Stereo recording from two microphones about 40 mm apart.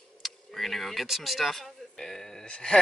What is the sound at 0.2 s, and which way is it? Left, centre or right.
Tick-tock, centre.